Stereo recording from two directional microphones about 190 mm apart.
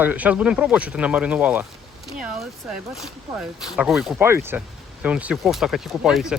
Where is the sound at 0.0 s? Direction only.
10° right (ahead or behind).